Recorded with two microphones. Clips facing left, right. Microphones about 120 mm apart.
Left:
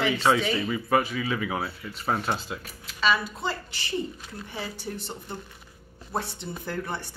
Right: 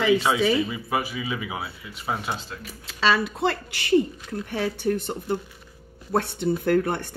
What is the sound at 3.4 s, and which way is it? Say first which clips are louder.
Speech: right 7 dB; 65° right (ahead or behind).